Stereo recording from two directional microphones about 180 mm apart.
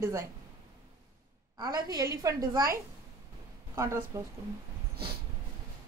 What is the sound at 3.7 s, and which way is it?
Speech, 15° right (ahead or behind).